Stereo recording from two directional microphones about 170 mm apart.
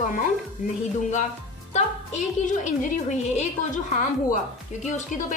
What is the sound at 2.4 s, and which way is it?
A woman's voice, 50° left (ahead or behind).